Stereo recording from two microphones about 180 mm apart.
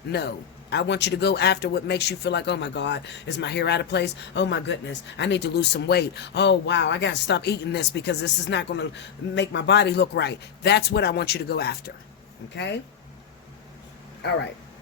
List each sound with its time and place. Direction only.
0.1 s speech: 65° left (ahead or behind)